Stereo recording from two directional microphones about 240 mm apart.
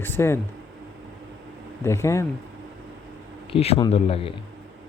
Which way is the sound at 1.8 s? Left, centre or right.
Centre.